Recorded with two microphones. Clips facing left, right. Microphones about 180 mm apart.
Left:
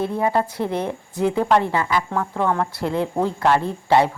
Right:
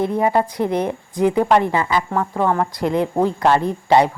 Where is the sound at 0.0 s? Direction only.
15° right (ahead or behind).